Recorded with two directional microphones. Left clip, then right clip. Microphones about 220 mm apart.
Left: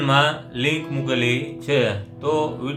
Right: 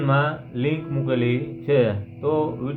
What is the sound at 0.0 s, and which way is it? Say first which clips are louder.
Speech: left 4 dB; 15° right (ahead or behind).